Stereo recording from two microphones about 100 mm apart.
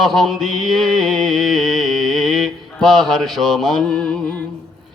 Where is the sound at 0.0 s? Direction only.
Centre (ahead or behind).